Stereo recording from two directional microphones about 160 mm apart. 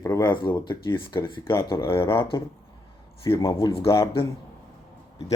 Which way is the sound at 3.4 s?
20° left (ahead or behind).